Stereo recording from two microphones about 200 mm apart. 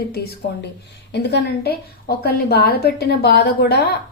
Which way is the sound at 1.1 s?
60° left (ahead or behind).